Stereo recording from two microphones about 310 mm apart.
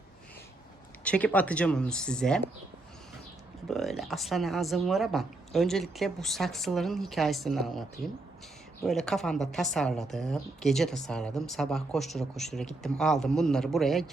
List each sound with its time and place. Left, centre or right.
1.0 s speech: centre
3.7 s speech: centre